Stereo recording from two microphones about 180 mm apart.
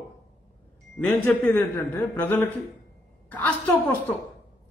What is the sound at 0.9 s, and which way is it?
A woman's voice, 10° left (ahead or behind).